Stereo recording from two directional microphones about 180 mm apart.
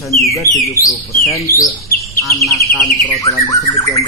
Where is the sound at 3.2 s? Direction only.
20° left (ahead or behind).